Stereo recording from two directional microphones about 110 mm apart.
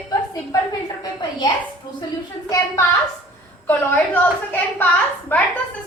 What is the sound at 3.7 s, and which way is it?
A woman's voice, 15° left (ahead or behind).